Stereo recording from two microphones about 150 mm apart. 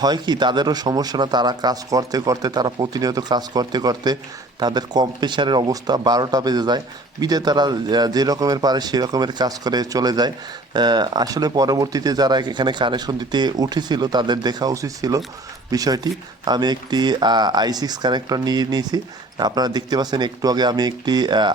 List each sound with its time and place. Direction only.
0.0 s speech: 30° right (ahead or behind)